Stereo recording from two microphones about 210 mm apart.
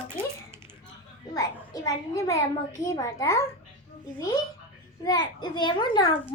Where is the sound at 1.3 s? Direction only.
15° left (ahead or behind).